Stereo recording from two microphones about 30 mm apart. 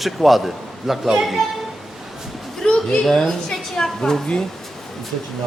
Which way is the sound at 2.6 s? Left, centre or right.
Left.